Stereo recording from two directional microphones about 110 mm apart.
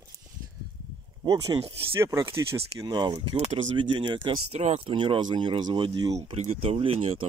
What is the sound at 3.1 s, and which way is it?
Speech, 65° right (ahead or behind).